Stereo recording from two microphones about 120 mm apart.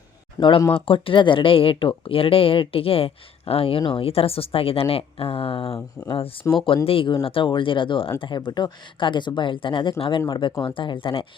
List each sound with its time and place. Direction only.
0.3 s speech: 45° left (ahead or behind)